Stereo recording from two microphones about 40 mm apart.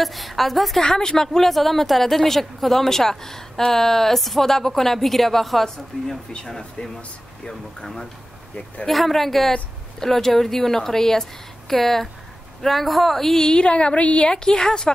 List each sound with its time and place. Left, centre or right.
0.0 s speech: centre
0.8 s a woman's voice: centre
13.5 s a woman's voice: left
14.4 s a woman's voice: centre